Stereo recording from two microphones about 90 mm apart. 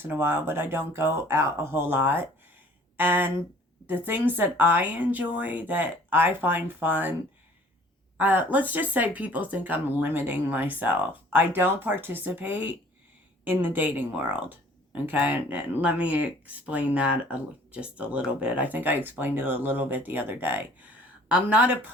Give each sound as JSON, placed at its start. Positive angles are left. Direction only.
{"t": 0.0, "sound": "speech", "side_deg": -25}
{"t": 8.2, "sound": "speech", "side_deg": -20}